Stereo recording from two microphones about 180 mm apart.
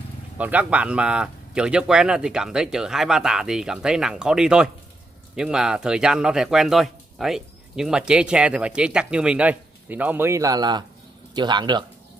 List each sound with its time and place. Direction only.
0.4 s speech: 10° right (ahead or behind); by 11.8 s 25° right (ahead or behind)